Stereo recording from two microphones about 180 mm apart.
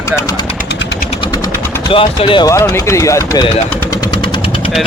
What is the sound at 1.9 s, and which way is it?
Speech, 30° left (ahead or behind).